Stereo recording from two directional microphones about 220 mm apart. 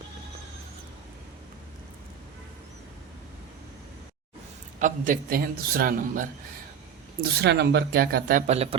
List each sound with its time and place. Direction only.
4.8 s a man's voice: 35° right (ahead or behind)
7.2 s speech: 50° right (ahead or behind); by 8.7 s 30° right (ahead or behind)